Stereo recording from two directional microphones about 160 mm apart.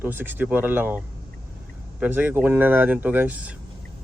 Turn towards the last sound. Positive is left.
turn(degrees=-10)  # may be behind; listen again after turning